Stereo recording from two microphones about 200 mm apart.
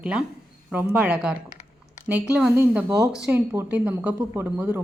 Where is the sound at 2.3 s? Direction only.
5° right (ahead or behind).